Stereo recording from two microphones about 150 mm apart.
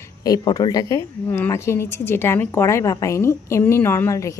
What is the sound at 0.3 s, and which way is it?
A woman's voice, 25° left (ahead or behind).